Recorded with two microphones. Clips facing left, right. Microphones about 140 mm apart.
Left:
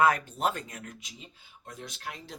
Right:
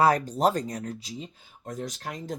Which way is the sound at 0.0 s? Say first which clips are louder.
Right 4 dB; 35° right (ahead or behind).